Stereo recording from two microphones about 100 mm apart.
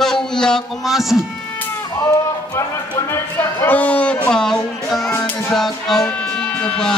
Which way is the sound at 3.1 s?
20° left (ahead or behind).